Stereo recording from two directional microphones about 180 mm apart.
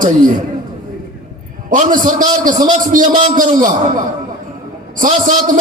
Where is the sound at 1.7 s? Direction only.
50° right (ahead or behind).